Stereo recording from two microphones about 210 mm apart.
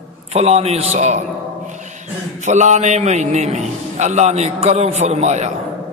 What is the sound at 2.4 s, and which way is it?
A man's voice, 35° right (ahead or behind).